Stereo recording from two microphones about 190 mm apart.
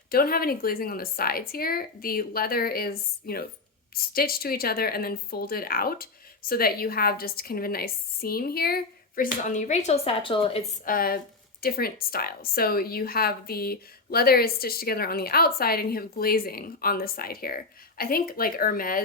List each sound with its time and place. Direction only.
0.1 s a woman's voice: 50° left (ahead or behind); by 10.6 s 25° left (ahead or behind)
10.8 s a woman's voice: 50° left (ahead or behind)